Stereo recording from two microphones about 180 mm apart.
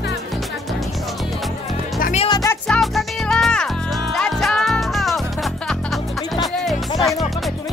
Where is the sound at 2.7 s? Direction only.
Centre (ahead or behind).